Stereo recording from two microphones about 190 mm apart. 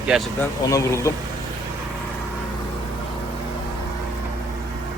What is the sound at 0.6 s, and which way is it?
Speech, 15° left (ahead or behind).